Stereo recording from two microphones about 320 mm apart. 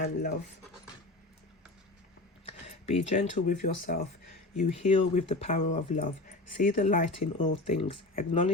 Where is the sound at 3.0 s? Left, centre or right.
Left.